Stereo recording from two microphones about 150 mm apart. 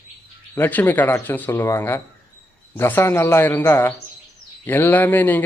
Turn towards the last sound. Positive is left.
turn(degrees=10)  # may be behind; listen again after turning